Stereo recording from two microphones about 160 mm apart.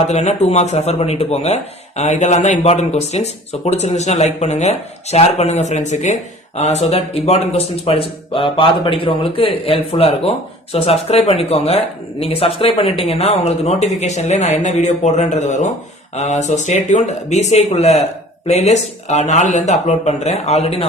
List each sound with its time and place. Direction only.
0.0 s a man's voice: 45° left (ahead or behind)